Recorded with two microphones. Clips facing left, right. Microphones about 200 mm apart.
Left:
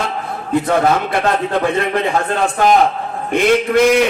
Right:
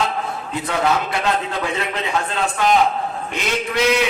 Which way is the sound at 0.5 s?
55° left (ahead or behind).